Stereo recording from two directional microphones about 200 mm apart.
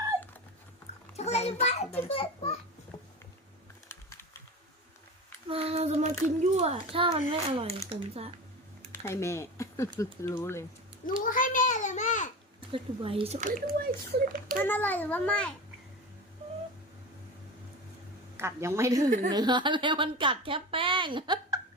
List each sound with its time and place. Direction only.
1.1 s a child's voice: 35° left (ahead or behind)
2.9 s a sound: 20° left (ahead or behind)
3.8 s typing: 15° left (ahead or behind)
5.5 s a child's voice: 30° right (ahead or behind)
8.9 s a child's voice: 15° left (ahead or behind)
11.2 s a sound: 40° left (ahead or behind)
12.7 s speech: 25° right (ahead or behind); by 13.9 s 45° right (ahead or behind)
14.6 s a child's voice: 10° left (ahead or behind)
18.3 s a woman's voice: 15° right (ahead or behind)